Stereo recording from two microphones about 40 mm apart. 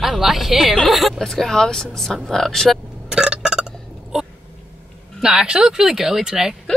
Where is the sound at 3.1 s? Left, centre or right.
Centre.